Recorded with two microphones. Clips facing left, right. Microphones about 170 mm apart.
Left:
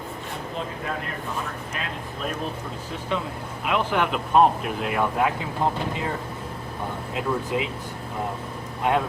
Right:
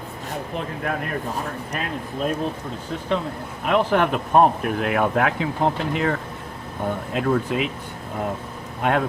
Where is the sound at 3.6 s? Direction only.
40° right (ahead or behind).